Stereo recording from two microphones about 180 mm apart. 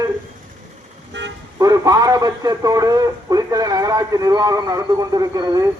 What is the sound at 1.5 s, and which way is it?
A man's voice, 20° right (ahead or behind).